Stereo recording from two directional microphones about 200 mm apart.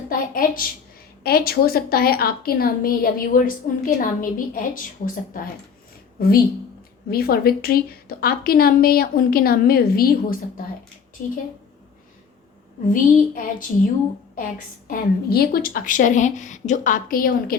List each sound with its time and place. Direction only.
0.1 s a woman's voice: 45° left (ahead or behind)
12.9 s a woman's voice: 45° left (ahead or behind)
14.8 s speech: 50° left (ahead or behind)